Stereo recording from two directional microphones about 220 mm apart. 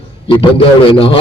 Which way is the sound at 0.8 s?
25° left (ahead or behind).